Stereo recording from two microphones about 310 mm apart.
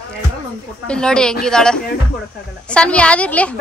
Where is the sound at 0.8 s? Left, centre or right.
Centre.